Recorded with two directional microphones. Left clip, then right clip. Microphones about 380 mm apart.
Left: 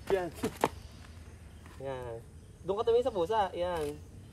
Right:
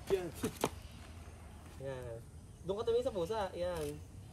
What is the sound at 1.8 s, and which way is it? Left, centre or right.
Speech, centre.